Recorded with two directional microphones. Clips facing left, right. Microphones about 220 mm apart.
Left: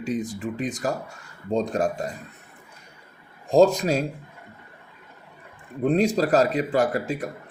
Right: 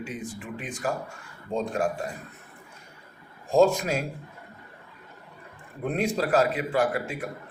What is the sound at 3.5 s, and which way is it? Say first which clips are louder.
Speech: left 3 dB; 35° left (ahead or behind).